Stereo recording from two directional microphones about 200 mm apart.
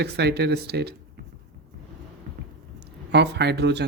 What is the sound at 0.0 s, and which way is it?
Speech, 55° right (ahead or behind).